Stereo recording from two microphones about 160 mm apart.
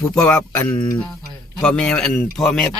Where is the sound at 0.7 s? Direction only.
30° left (ahead or behind).